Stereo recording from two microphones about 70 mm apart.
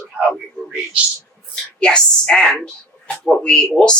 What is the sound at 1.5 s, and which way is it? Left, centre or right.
A woman's voice, centre.